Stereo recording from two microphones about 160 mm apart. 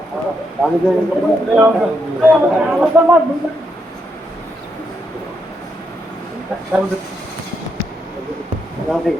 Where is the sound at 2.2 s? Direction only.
10° right (ahead or behind).